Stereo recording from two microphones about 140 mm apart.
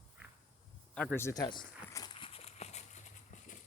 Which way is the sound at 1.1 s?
20° left (ahead or behind).